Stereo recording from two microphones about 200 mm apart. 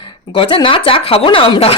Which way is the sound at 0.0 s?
25° left (ahead or behind).